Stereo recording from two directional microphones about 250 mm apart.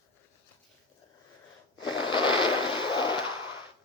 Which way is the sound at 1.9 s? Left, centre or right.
Centre.